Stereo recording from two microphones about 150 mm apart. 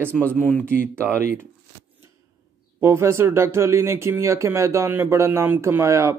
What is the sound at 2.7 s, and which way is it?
Speech, 20° right (ahead or behind).